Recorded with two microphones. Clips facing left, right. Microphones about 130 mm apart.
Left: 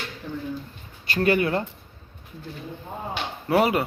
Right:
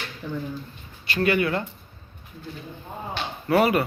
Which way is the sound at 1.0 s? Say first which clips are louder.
Left 1 dB; 40° left (ahead or behind).